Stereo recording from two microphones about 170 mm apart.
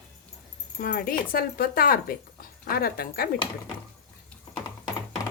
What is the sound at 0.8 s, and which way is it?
Speech, 60° left (ahead or behind).